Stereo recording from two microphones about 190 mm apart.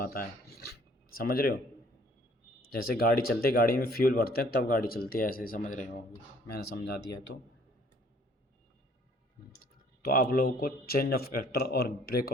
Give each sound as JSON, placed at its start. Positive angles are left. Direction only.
{"t": 0.0, "sound": "speech", "side_deg": 50}
{"t": 2.7, "sound": "speech", "side_deg": 50}
{"t": 6.5, "sound": "speech", "side_deg": 55}
{"t": 10.0, "sound": "speech", "side_deg": 50}